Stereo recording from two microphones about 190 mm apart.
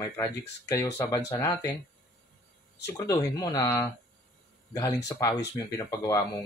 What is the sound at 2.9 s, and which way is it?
Speech, 20° left (ahead or behind).